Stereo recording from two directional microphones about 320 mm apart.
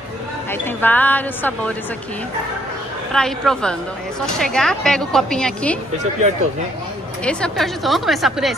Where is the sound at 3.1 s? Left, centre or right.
Centre.